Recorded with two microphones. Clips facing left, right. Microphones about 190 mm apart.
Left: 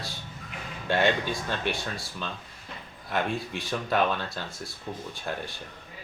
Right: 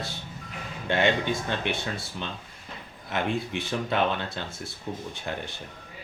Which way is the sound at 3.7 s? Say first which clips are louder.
Left 1 dB; 25° right (ahead or behind).